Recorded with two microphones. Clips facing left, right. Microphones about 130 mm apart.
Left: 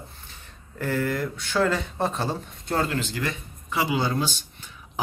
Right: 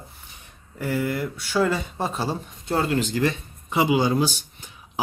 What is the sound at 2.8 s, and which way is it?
Speech, 15° right (ahead or behind).